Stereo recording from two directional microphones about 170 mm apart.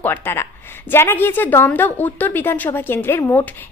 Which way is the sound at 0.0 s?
10° left (ahead or behind).